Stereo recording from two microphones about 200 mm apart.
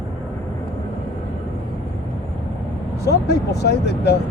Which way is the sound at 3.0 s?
55° left (ahead or behind).